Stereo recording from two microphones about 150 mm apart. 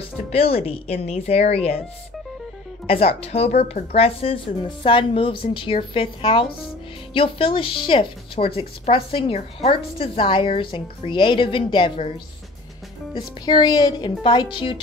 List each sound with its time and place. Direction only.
0.3 s a woman's voice: 40° left (ahead or behind)
2.9 s a woman's voice: 40° left (ahead or behind)
13.1 s a woman's voice: 30° left (ahead or behind)